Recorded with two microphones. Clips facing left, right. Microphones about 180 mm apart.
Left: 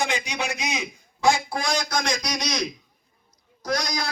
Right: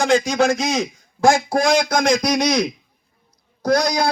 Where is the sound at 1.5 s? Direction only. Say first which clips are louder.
Right 9 dB; 50° right (ahead or behind).